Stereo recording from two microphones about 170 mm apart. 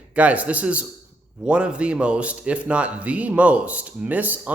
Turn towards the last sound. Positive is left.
turn(degrees=-10)  # may be behind; listen again after turning